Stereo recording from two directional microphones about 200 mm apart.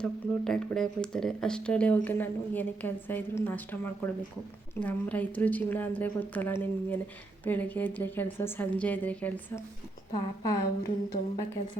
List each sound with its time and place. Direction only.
0.0 s a woman's voice: 5° left (ahead or behind)
10.1 s a woman's voice: 20° left (ahead or behind)